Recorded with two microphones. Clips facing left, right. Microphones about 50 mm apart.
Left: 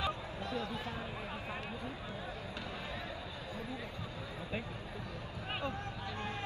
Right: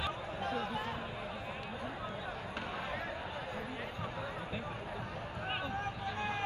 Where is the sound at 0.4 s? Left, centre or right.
Right.